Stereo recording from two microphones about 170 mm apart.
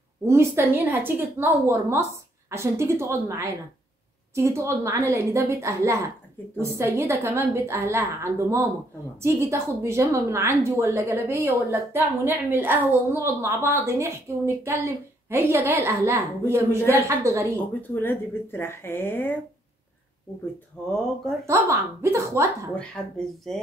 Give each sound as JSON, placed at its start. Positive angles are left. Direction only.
{"t": 0.2, "sound": "a woman's voice", "side_deg": -15}
{"t": 17.6, "sound": "speech", "side_deg": 10}
{"t": 21.5, "sound": "a woman's voice", "side_deg": -15}
{"t": 22.8, "sound": "speech", "side_deg": 5}